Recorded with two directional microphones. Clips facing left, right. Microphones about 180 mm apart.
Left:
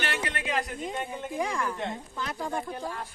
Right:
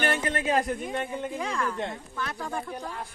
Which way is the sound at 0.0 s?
45° right (ahead or behind).